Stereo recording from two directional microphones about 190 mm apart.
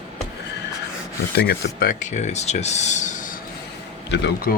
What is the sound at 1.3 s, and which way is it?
Speech, 60° left (ahead or behind).